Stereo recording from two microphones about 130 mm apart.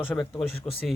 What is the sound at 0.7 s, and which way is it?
Speech, 10° left (ahead or behind).